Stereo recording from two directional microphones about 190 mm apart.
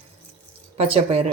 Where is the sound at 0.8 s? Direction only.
30° right (ahead or behind).